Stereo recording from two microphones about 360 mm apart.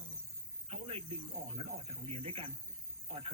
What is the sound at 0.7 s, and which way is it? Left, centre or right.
Speech, centre.